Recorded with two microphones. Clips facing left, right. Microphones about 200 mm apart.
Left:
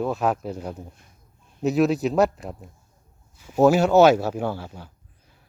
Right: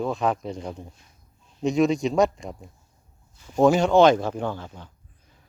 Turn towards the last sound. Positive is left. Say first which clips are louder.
# left 2 dB
turn(degrees=10)  # may be behind; listen again after turning